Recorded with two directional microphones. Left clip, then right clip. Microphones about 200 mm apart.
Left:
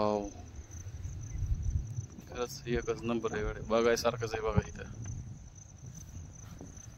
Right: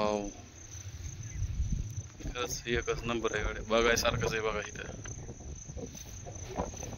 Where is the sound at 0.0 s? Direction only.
Centre (ahead or behind).